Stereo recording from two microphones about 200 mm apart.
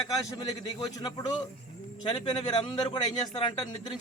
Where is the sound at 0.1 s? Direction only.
15° left (ahead or behind).